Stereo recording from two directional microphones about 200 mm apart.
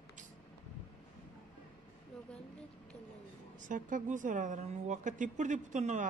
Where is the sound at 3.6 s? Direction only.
40° right (ahead or behind).